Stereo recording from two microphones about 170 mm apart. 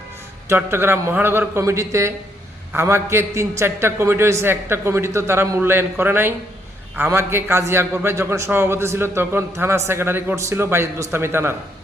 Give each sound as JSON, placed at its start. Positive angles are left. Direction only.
{"t": 0.4, "sound": "a man's voice", "side_deg": -15}